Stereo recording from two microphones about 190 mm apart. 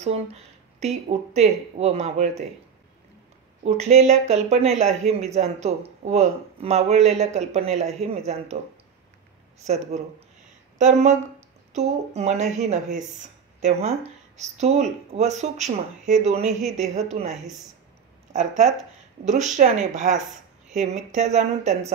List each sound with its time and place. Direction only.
0.0 s speech: 35° right (ahead or behind)
3.6 s speech: 35° right (ahead or behind)
10.8 s speech: 35° right (ahead or behind)